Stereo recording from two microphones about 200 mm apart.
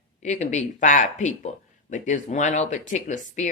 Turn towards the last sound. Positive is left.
turn(degrees=35)  # may be behind; listen again after turning